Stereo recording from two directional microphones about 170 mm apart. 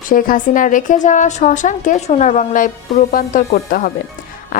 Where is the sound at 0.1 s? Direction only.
55° left (ahead or behind).